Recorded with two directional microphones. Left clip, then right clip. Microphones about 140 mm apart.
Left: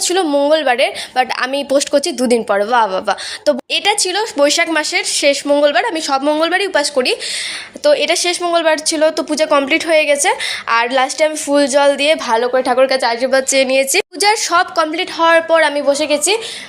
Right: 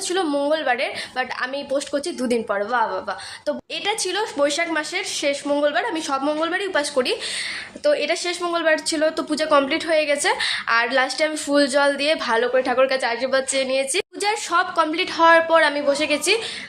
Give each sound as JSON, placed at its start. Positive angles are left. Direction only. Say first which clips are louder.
{"t": 0.0, "sound": "a woman's voice", "louder": "left 8 dB", "side_deg": 45}
{"t": 3.7, "sound": "a woman's voice", "louder": "left 9 dB", "side_deg": 40}
{"t": 4.4, "sound": "a woman's voice", "louder": "left 8 dB", "side_deg": 50}
{"t": 5.1, "sound": "a woman's voice", "louder": "left 9 dB", "side_deg": 35}
{"t": 6.7, "sound": "a woman's voice", "louder": "left 6 dB", "side_deg": 30}
{"t": 8.4, "sound": "a woman's voice", "louder": "left 6 dB", "side_deg": 25}
{"t": 14.9, "sound": "a woman's voice", "louder": "left 2 dB", "side_deg": 20}